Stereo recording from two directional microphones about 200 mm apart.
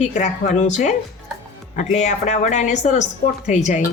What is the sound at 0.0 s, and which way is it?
Speech, 35° left (ahead or behind).